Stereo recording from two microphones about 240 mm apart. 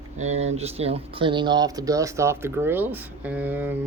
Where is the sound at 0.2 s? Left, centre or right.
Right.